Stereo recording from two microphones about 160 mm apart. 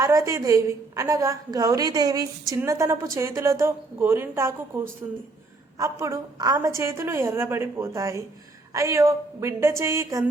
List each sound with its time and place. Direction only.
0.0 s a woman's voice: 20° right (ahead or behind)